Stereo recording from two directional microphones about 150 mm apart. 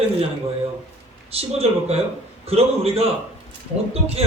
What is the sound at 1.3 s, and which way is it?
A man's voice, 40° right (ahead or behind).